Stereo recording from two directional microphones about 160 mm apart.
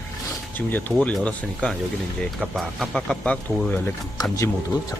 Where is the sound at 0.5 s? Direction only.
10° left (ahead or behind).